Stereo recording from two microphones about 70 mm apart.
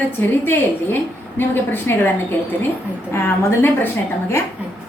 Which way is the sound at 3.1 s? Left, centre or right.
Left.